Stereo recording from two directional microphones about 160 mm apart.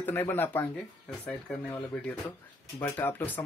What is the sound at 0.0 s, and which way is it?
Speech, 15° left (ahead or behind).